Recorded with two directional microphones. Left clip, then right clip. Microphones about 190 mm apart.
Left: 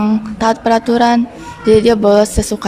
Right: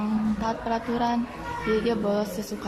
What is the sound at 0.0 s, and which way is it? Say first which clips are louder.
Speech: left 13 dB; 60° left (ahead or behind).